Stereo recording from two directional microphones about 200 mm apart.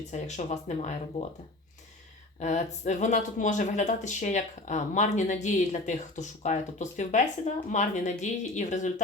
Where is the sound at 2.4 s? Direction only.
35° left (ahead or behind).